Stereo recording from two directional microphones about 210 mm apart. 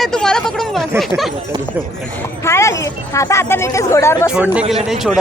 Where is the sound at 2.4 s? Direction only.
15° left (ahead or behind).